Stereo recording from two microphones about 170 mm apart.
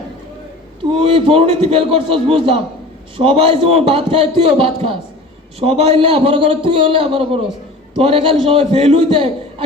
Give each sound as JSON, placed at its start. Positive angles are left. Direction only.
{"t": 0.9, "sound": "a man's voice", "side_deg": -30}